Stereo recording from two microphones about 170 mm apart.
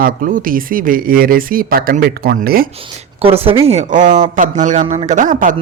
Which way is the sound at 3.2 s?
35° right (ahead or behind).